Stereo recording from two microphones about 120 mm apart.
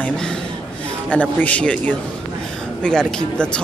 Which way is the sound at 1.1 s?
10° left (ahead or behind).